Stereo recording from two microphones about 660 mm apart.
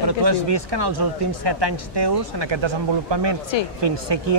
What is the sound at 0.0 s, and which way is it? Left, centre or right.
Speech, right.